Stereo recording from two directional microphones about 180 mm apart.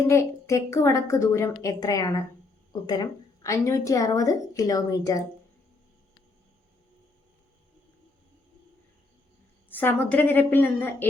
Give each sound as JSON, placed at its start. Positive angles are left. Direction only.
{"t": 0.1, "sound": "a woman's voice", "side_deg": 15}
{"t": 9.6, "sound": "a woman's voice", "side_deg": 10}